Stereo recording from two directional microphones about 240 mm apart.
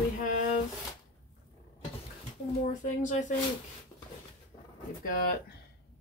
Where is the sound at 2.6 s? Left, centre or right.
Left.